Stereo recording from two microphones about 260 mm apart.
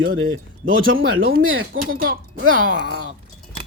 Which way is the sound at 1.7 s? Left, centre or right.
Right.